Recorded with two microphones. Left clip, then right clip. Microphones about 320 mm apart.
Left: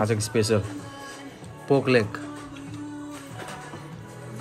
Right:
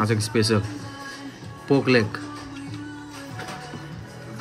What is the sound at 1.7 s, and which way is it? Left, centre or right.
Speech, centre.